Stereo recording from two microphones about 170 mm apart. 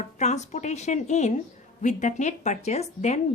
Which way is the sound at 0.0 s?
40° left (ahead or behind).